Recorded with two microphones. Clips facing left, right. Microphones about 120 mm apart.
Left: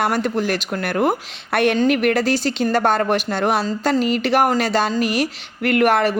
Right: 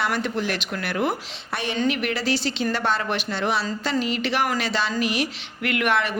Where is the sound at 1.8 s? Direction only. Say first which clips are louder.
Left 7 dB; 50° left (ahead or behind).